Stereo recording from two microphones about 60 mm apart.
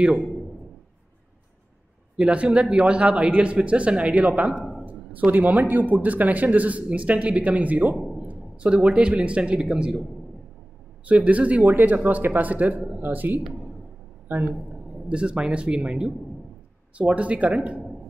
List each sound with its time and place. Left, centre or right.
2.1 s a man's voice: centre
7.9 s a man's voice: centre
8.3 s a man's voice: centre
11.1 s a man's voice: right
15.0 s a man's voice: centre